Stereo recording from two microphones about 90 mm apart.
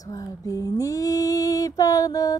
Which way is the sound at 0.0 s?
40° left (ahead or behind).